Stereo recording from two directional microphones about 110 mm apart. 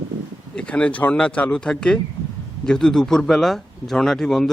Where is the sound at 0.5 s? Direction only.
10° left (ahead or behind).